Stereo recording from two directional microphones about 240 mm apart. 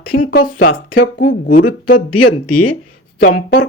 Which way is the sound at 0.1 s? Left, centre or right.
Left.